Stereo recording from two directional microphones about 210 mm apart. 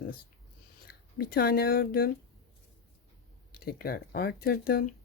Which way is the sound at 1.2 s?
45° left (ahead or behind).